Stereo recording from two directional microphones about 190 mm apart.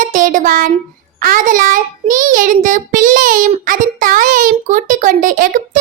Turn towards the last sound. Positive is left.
turn(degrees=-45)  # may be behind; listen again after turning